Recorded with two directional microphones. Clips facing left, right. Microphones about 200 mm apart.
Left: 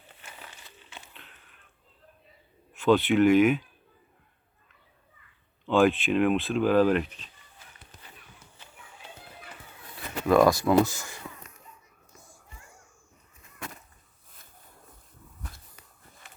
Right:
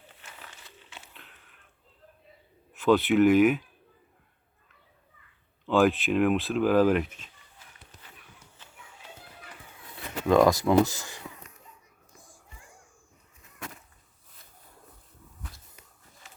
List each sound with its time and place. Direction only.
0.2 s crumpling: centre (ahead or behind)
2.7 s speech: centre (ahead or behind)
5.6 s speech: centre (ahead or behind)
10.2 s speech: 20° right (ahead or behind)
16.2 s a sound: 55° left (ahead or behind)